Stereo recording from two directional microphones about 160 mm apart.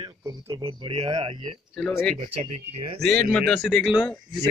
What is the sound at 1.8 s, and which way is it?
Speech, 5° left (ahead or behind).